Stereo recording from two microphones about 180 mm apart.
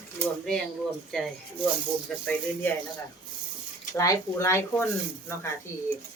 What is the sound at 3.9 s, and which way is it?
Speech, 20° left (ahead or behind).